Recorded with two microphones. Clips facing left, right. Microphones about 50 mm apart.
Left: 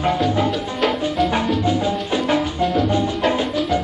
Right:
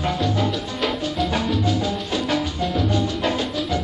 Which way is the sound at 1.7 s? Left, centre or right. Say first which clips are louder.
Left 3 dB; left.